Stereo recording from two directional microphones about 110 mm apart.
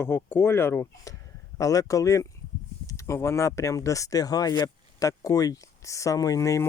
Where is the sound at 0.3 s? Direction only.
20° left (ahead or behind).